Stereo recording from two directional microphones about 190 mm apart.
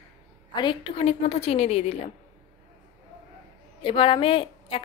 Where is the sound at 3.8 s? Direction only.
25° left (ahead or behind).